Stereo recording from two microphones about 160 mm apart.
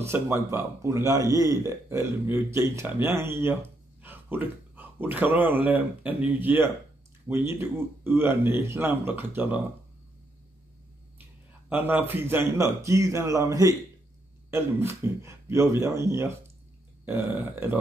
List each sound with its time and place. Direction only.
0.0 s a man's voice: 15° right (ahead or behind)
11.7 s a man's voice: 10° right (ahead or behind)